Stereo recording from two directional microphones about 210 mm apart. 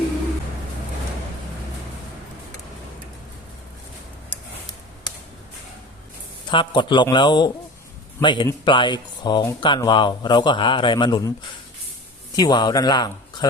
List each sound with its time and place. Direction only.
6.5 s speech: 20° left (ahead or behind)
12.4 s speech: 20° left (ahead or behind)